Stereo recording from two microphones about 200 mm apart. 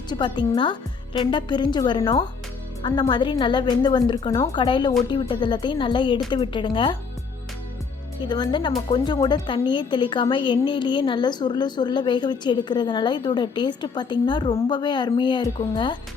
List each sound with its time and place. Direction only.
0.1 s a woman's voice: 25° left (ahead or behind)
8.2 s a woman's voice: 20° left (ahead or behind)